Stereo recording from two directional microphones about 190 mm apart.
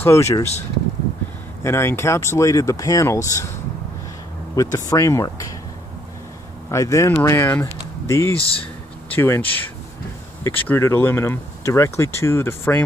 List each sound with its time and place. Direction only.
0.0 s speech: 15° left (ahead or behind)
1.6 s speech: 15° left (ahead or behind)
4.6 s speech: 15° left (ahead or behind)
6.7 s speech: 15° left (ahead or behind)
8.4 s speech: 30° left (ahead or behind)
9.1 s speech: 10° left (ahead or behind)